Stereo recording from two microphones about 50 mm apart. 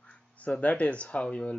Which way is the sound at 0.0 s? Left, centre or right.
Left.